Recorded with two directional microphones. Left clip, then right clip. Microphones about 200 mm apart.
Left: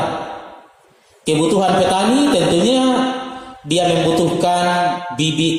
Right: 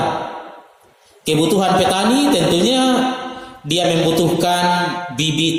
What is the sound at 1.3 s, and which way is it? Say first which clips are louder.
A man's voice: even; 50° right (ahead or behind).